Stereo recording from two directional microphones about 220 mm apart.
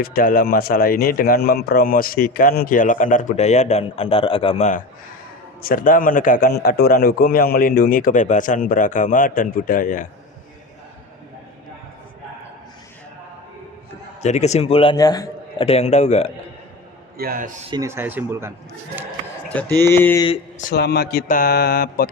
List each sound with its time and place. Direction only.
0.0 s speech: 40° left (ahead or behind)
14.2 s a man's voice: 30° left (ahead or behind)
17.2 s a man's voice: 40° right (ahead or behind)
17.7 s speech: 15° right (ahead or behind)
19.5 s speech: 5° left (ahead or behind)
20.2 s speech: 25° left (ahead or behind)
20.7 s speech: 45° left (ahead or behind)